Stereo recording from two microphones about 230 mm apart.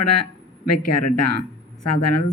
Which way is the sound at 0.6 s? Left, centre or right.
Left.